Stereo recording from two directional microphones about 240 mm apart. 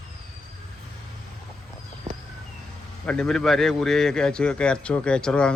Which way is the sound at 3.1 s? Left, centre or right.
Centre.